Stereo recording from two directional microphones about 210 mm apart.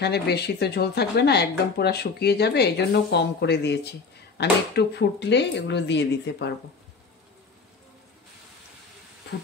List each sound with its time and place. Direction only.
0.0 s speech: 50° left (ahead or behind)